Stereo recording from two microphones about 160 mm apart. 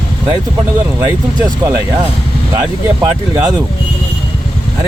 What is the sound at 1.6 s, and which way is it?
Speech, 20° right (ahead or behind).